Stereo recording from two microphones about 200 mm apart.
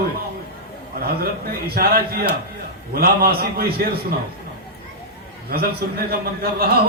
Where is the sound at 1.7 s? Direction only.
50° right (ahead or behind).